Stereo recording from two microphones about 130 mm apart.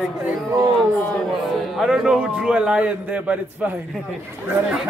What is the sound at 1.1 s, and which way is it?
A man's voice, centre (ahead or behind).